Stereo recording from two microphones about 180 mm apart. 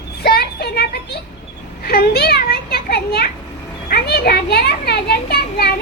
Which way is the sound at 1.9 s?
60° left (ahead or behind).